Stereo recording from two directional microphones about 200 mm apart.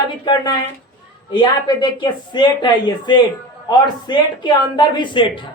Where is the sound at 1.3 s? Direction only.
20° left (ahead or behind).